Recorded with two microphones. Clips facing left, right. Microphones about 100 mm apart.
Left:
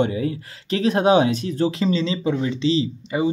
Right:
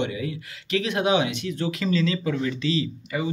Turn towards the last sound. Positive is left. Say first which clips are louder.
# left 5 dB
turn(degrees=25)  # may be behind; listen again after turning